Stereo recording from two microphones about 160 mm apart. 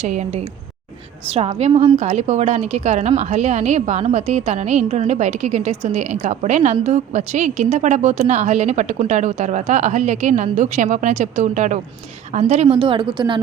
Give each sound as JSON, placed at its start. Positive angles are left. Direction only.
{"t": 0.0, "sound": "a woman's voice", "side_deg": -45}